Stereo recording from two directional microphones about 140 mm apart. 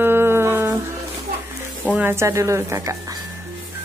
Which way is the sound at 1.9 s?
15° right (ahead or behind).